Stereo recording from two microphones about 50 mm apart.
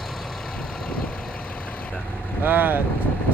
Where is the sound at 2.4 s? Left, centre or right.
Right.